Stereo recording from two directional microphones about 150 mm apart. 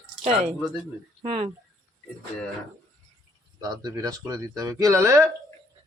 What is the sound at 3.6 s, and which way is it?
Speech, 25° right (ahead or behind).